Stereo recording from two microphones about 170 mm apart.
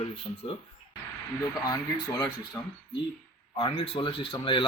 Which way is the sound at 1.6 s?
20° left (ahead or behind).